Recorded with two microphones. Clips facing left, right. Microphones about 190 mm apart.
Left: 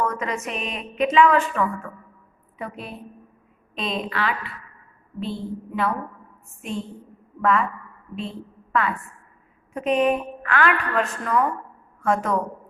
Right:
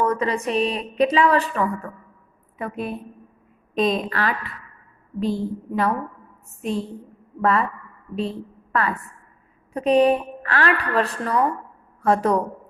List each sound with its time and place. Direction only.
0.0 s a woman's voice: 30° right (ahead or behind)
2.6 s a woman's voice: 50° right (ahead or behind)
8.7 s a woman's voice: 40° right (ahead or behind)